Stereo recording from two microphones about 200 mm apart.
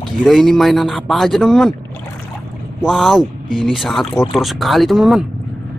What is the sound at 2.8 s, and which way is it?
Speech, centre (ahead or behind).